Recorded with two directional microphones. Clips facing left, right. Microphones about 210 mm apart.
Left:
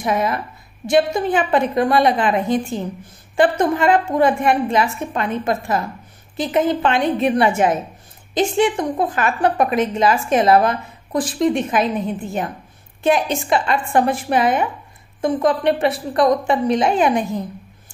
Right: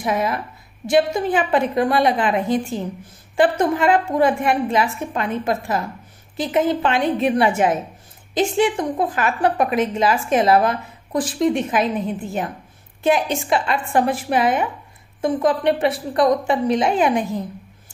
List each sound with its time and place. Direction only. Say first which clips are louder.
0.0 s a woman's voice: left 1 dB; 5° right (ahead or behind)
13.0 s a woman's voice: left 1 dB; 5° right (ahead or behind)